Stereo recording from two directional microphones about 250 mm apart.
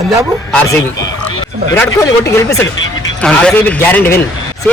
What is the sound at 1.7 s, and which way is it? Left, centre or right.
A man's voice, centre.